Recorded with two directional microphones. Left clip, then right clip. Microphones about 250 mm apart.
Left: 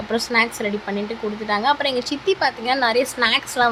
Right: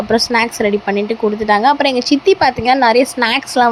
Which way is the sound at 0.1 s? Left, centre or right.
Right.